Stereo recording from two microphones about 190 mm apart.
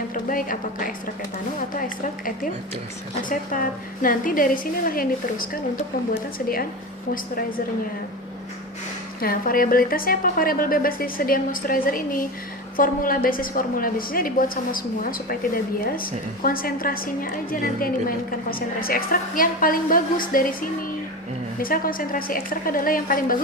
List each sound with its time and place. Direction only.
0.1 s speech: 45° left (ahead or behind)
3.2 s a woman's voice: 45° left (ahead or behind)
9.2 s a woman's voice: 50° left (ahead or behind)